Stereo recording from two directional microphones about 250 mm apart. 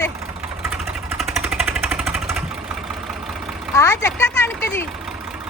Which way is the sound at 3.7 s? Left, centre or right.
Centre.